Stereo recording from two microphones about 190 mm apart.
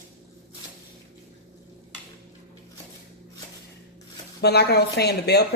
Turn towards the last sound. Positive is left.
turn(degrees=60)  # may be behind; listen again after turning